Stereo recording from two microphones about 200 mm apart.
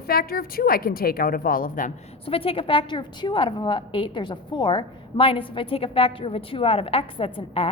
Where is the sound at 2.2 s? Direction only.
25° left (ahead or behind).